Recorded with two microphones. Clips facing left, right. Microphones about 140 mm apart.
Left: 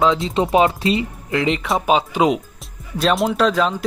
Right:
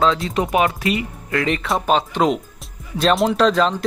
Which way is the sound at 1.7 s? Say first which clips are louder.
Left 1 dB; centre (ahead or behind).